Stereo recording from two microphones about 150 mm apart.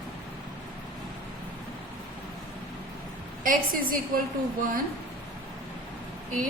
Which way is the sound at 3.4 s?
65° right (ahead or behind).